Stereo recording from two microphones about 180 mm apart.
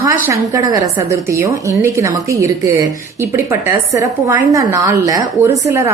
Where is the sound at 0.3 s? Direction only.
20° right (ahead or behind).